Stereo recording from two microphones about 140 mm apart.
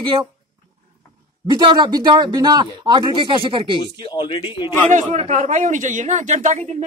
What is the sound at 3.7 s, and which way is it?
Speech, 35° left (ahead or behind).